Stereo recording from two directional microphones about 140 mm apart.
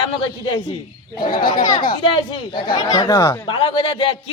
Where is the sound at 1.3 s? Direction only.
90° left.